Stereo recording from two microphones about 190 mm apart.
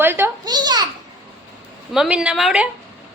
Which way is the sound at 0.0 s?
10° right (ahead or behind).